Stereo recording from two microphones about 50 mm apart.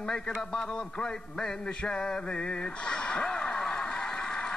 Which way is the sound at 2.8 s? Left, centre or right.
Left.